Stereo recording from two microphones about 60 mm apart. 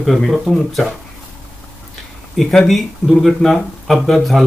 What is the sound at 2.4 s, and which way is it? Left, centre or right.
Speech, centre.